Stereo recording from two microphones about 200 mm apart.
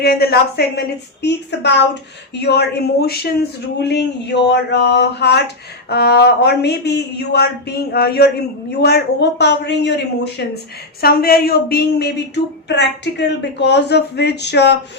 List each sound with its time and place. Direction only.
0.0 s a woman's voice: 50° left (ahead or behind)